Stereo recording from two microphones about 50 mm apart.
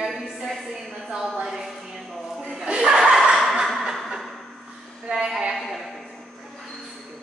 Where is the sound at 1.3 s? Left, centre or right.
Centre.